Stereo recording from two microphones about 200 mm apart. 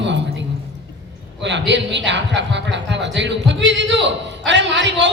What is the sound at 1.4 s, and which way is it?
Speech, 60° right (ahead or behind).